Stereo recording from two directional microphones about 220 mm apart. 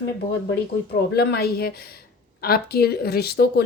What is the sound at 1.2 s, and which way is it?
Speech, 45° left (ahead or behind).